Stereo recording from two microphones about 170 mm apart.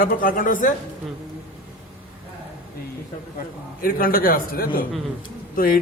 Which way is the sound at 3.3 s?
60° left (ahead or behind).